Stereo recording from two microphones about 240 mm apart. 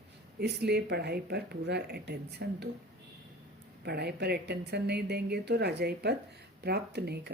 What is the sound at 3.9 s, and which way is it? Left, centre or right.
Speech, right.